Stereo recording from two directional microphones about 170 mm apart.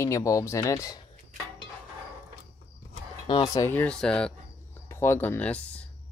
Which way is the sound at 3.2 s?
25° left (ahead or behind).